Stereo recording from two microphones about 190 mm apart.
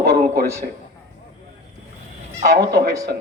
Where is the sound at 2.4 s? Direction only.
55° right (ahead or behind).